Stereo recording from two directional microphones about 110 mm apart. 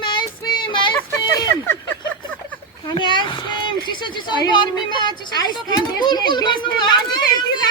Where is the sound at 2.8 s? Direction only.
45° left (ahead or behind).